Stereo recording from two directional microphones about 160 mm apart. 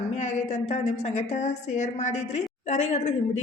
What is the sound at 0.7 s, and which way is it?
A woman's voice, 45° left (ahead or behind).